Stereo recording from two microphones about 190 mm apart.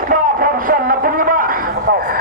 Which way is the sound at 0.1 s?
45° right (ahead or behind).